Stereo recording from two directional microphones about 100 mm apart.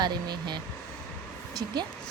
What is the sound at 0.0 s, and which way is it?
Speech, 45° right (ahead or behind).